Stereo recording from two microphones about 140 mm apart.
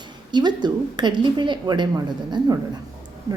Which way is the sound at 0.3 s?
30° right (ahead or behind).